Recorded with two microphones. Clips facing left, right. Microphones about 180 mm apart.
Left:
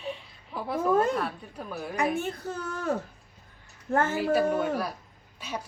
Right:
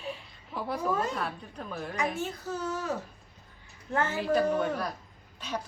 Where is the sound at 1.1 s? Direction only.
Centre (ahead or behind).